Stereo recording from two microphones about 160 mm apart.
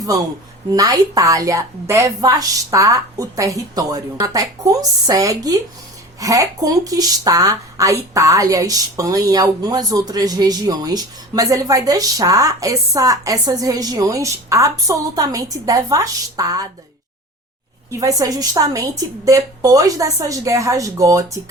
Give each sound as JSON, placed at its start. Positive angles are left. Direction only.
{"t": 0.0, "sound": "a woman's voice", "side_deg": -20}
{"t": 17.9, "sound": "a woman's voice", "side_deg": -20}